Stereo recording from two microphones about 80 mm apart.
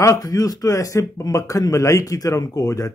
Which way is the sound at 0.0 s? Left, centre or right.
Left.